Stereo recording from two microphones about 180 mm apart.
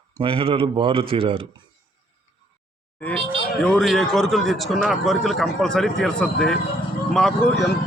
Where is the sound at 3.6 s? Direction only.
Centre (ahead or behind).